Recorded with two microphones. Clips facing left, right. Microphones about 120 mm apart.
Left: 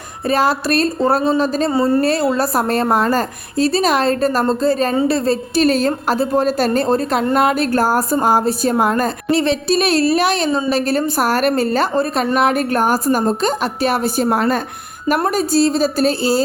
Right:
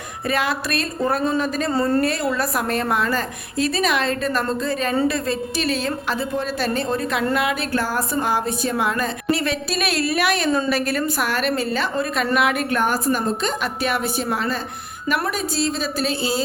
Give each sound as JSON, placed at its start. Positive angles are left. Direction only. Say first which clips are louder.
{"t": 0.3, "sound": "a woman's voice", "louder": "left 7 dB", "side_deg": 35}
{"t": 9.3, "sound": "a woman's voice", "louder": "left 8 dB", "side_deg": 30}